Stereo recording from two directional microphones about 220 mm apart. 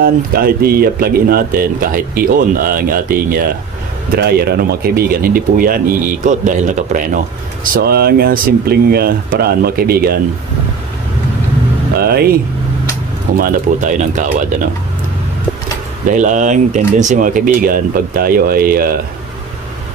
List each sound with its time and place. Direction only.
0.0 s speech: 45° right (ahead or behind)
12.0 s speech: 45° right (ahead or behind)
13.4 s speech: 35° right (ahead or behind)
16.1 s speech: 35° right (ahead or behind)